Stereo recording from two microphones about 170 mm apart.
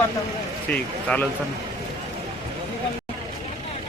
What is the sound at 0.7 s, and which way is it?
Speech, 10° left (ahead or behind).